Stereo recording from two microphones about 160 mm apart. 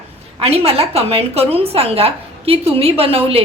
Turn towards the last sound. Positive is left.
turn(degrees=-35)  # may be behind; listen again after turning